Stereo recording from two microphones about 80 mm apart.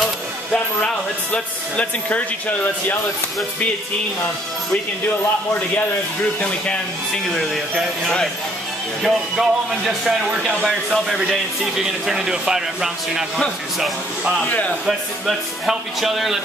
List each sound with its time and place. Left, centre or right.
0.0 s speech: centre
7.2 s speech: centre
9.0 s speech: centre
14.4 s speech: centre
14.7 s speech: centre